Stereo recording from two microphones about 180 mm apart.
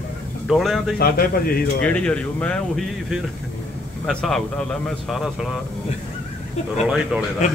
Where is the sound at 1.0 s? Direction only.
55° left (ahead or behind).